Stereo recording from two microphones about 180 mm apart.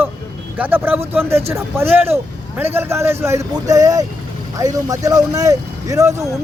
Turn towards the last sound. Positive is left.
turn(degrees=-20)  # may be behind; listen again after turning